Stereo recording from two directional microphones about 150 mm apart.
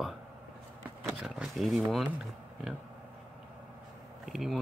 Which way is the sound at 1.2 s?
Centre (ahead or behind).